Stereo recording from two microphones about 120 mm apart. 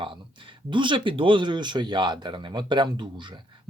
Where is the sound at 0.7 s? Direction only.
40° right (ahead or behind).